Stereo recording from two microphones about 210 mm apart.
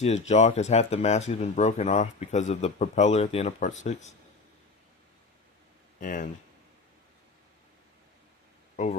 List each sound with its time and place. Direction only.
0.0 s speech: 30° left (ahead or behind)
6.0 s speech: 40° left (ahead or behind)
8.7 s a sound: 35° left (ahead or behind)